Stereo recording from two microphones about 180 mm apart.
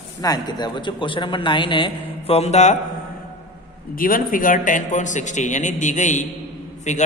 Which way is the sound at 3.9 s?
50° left (ahead or behind).